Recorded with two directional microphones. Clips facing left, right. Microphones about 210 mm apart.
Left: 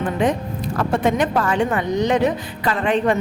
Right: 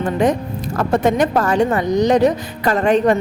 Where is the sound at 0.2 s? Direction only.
40° right (ahead or behind).